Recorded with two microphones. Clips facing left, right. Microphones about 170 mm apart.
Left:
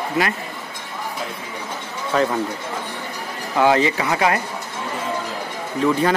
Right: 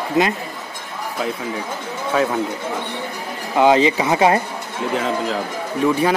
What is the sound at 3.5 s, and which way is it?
Speech, 20° right (ahead or behind).